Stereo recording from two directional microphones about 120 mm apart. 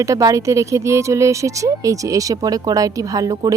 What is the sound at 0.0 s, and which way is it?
Speech, 25° right (ahead or behind).